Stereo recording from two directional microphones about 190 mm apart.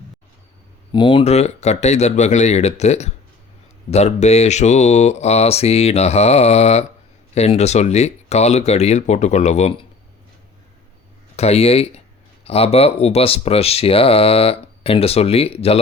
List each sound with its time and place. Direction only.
0.9 s speech: 25° left (ahead or behind)
11.3 s speech: 30° left (ahead or behind)